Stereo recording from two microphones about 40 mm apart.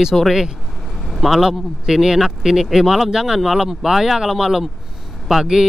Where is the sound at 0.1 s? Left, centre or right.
Centre.